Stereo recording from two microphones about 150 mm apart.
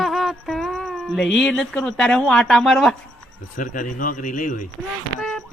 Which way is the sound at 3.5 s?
65° left (ahead or behind).